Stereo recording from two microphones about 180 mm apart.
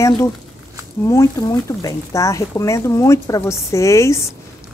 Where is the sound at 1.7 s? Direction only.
20° left (ahead or behind).